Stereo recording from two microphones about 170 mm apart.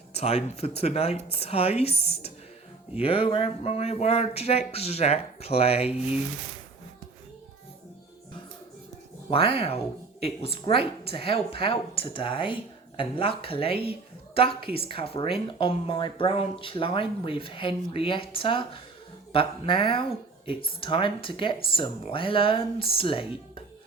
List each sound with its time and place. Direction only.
0.1 s a woman's voice: 35° left (ahead or behind)
9.3 s a woman's voice: 35° left (ahead or behind)